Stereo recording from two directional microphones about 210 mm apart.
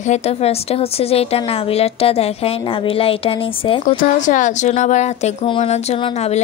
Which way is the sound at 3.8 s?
40° left (ahead or behind).